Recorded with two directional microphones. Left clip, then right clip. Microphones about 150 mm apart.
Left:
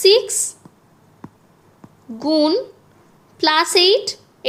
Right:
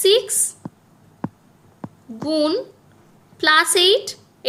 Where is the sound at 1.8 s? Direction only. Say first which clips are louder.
Right 10 dB; 5° right (ahead or behind).